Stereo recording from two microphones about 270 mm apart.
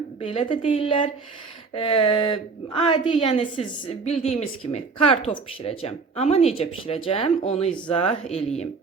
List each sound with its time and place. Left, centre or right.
0.2 s a woman's voice: left